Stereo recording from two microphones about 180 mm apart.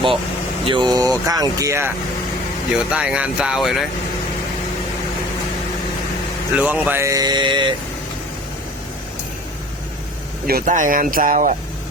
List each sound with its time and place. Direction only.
0.6 s speech: 25° right (ahead or behind)
2.7 s speech: 5° right (ahead or behind)
6.6 s speech: 10° right (ahead or behind); by 7.8 s 25° right (ahead or behind)
10.4 s speech: 50° right (ahead or behind)